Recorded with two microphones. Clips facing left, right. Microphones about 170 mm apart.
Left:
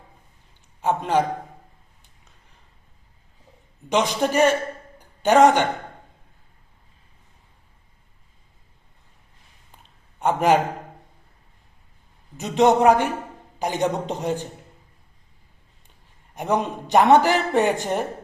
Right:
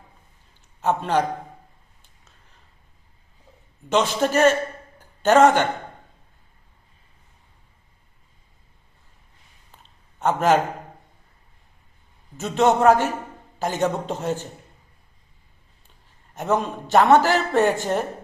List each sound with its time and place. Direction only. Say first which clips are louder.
0.8 s a man's voice: even; 10° left (ahead or behind)
3.8 s a man's voice: right 1 dB; 15° left (ahead or behind)
4.9 s a sound: even; 15° left (ahead or behind)
10.2 s a man's voice: even; 15° left (ahead or behind)
12.4 s a man's voice: left 1 dB; 15° left (ahead or behind)
16.3 s a man's voice: even; 15° left (ahead or behind)